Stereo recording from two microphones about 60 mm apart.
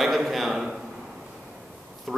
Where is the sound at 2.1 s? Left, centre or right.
Centre.